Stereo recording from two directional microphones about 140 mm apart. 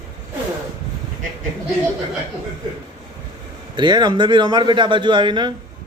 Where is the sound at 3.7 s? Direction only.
35° right (ahead or behind).